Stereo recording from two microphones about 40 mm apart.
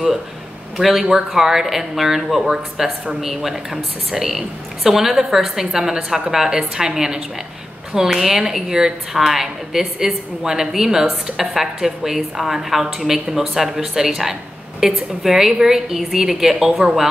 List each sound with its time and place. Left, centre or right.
0.7 s a woman's voice: centre
2.5 s a woman's voice: centre